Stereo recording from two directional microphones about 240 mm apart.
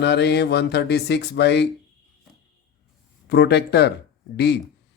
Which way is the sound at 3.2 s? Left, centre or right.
Left.